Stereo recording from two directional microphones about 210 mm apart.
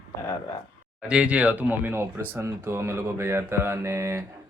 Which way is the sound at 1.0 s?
5° right (ahead or behind).